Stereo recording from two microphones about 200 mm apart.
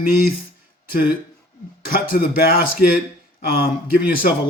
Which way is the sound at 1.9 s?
45° left (ahead or behind).